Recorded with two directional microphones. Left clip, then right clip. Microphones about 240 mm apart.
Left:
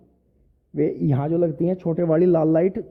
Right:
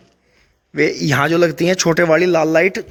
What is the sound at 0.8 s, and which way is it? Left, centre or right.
Speech, centre.